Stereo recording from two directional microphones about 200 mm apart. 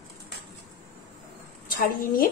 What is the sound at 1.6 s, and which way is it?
Speech, 45° left (ahead or behind).